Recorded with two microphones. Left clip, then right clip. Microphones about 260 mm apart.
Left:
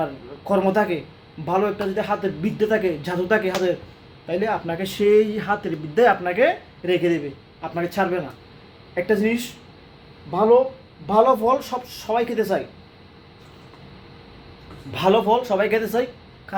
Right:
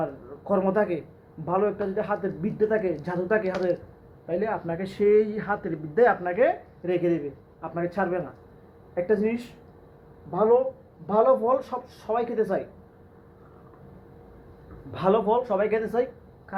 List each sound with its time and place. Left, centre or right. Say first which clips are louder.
0.0 s speech: left 4 dB; centre
14.9 s speech: left 5 dB; centre